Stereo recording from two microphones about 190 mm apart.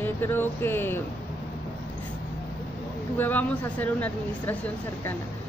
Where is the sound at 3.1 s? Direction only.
10° left (ahead or behind).